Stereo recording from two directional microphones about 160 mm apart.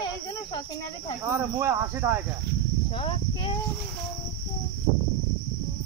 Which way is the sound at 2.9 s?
35° left (ahead or behind).